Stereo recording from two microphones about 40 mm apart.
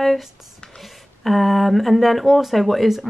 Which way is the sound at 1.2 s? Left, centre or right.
Centre.